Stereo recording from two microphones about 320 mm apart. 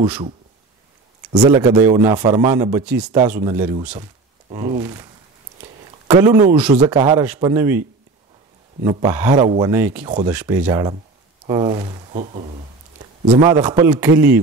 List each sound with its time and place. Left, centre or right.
1.3 s speech: centre
4.5 s speech: centre
6.0 s speech: centre
8.8 s speech: centre